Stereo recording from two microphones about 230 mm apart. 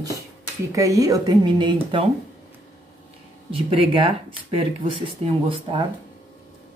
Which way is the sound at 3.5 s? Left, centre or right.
Right.